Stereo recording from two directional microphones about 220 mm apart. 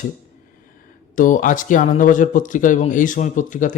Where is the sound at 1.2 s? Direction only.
35° left (ahead or behind).